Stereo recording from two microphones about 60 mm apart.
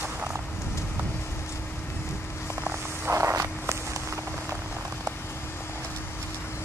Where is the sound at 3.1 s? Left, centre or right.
Right.